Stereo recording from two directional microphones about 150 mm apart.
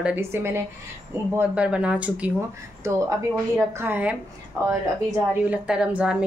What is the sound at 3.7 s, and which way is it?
Speech, 10° right (ahead or behind).